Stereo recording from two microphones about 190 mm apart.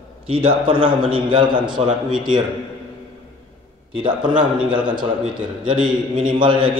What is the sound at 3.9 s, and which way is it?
Speech, 25° right (ahead or behind).